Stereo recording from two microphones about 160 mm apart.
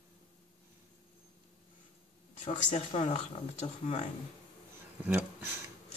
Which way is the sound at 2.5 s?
50° left (ahead or behind).